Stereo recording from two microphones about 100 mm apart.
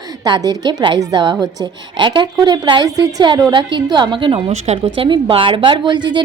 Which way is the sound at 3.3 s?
50° right (ahead or behind).